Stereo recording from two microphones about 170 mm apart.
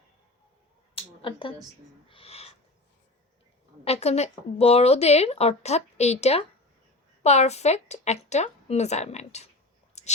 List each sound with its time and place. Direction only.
0.9 s finger snapping: 30° left (ahead or behind)
2.0 s a sound: 35° left (ahead or behind)
3.8 s a woman's voice: 40° left (ahead or behind)
10.0 s whispering: 40° left (ahead or behind)